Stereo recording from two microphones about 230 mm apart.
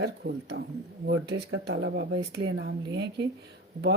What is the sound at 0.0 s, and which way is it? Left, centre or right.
Speech, right.